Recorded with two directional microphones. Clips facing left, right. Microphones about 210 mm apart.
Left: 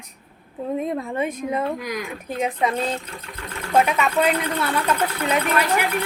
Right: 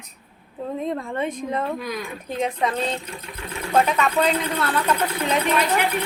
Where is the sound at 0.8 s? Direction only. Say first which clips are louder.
Left 1 dB; 10° left (ahead or behind).